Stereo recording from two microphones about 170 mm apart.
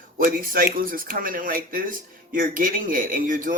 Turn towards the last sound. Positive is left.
turn(degrees=-55)  # may be behind; listen again after turning